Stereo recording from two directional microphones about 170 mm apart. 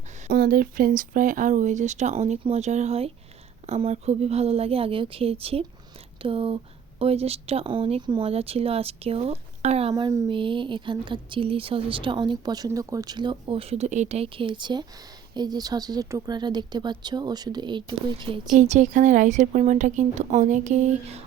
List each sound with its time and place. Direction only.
0.3 s speech: 60° right (ahead or behind); by 9.9 s 40° right (ahead or behind)
9.9 s speech: 25° right (ahead or behind)
18.5 s speech: 45° right (ahead or behind)